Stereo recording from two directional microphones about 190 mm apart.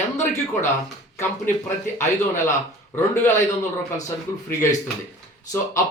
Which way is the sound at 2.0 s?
15° left (ahead or behind).